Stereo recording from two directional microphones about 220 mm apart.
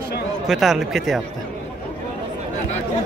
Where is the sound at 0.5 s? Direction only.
Centre (ahead or behind).